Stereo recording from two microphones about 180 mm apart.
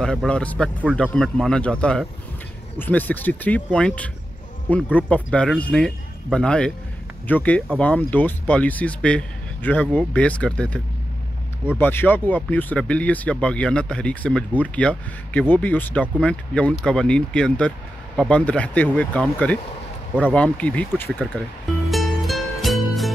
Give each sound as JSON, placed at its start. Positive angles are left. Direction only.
{"t": 0.0, "sound": "speech", "side_deg": 5}
{"t": 11.8, "sound": "speech", "side_deg": 10}
{"t": 21.9, "sound": "music", "side_deg": 0}